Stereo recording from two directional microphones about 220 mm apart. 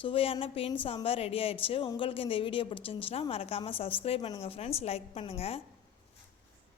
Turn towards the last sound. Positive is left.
turn(degrees=25)  # may be behind; listen again after turning